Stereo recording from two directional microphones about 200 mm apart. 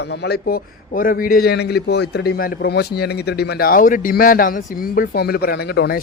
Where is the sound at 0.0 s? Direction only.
55° left (ahead or behind).